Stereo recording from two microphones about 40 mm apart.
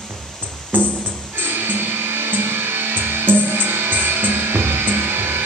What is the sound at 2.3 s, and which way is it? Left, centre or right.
Music, right.